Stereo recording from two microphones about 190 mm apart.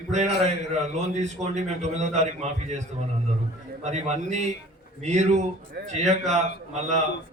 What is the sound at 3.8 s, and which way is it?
A man's voice, 35° right (ahead or behind).